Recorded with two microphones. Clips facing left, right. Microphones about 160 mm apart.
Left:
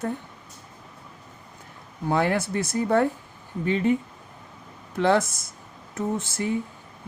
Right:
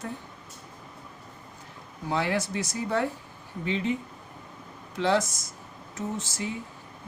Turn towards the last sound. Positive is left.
turn(degrees=55)  # may be behind; listen again after turning